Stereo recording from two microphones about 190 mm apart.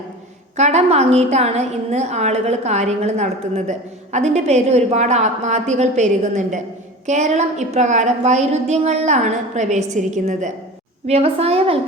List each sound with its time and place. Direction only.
0.5 s a woman's voice: 35° right (ahead or behind)